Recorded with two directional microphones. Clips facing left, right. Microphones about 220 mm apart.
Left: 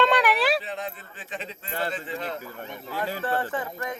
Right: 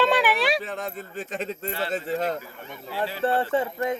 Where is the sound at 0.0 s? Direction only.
Centre (ahead or behind).